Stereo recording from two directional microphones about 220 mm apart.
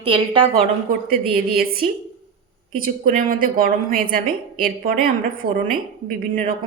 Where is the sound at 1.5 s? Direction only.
40° right (ahead or behind).